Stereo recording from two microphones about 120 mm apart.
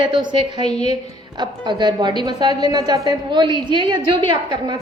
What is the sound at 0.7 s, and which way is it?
Speech, 65° left (ahead or behind).